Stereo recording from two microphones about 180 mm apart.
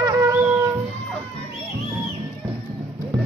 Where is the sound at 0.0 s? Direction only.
20° right (ahead or behind).